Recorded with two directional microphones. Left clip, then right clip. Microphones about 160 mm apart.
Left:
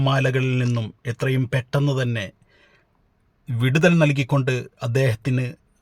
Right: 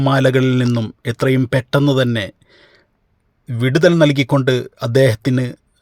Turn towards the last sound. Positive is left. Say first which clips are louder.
# right 8 dB
turn(degrees=-30)  # may be behind; listen again after turning